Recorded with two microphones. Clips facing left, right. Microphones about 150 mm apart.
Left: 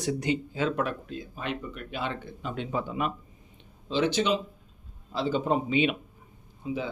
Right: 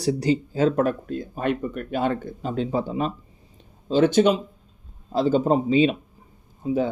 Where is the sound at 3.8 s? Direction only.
45° right (ahead or behind).